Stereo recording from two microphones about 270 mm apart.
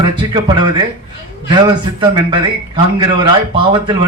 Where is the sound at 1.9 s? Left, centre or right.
Centre.